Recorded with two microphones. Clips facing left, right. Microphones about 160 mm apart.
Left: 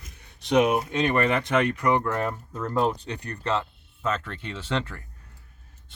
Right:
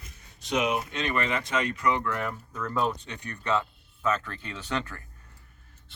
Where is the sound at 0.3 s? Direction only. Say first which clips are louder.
Left 6 dB; 60° left (ahead or behind); by 3.6 s 35° left (ahead or behind).